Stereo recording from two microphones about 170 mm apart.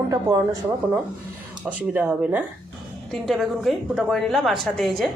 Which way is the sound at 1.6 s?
10° right (ahead or behind).